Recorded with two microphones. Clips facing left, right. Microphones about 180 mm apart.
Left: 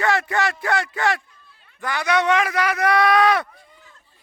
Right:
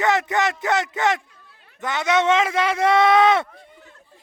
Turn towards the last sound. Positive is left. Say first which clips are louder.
# right 2 dB
turn(degrees=-25)  # may be behind; listen again after turning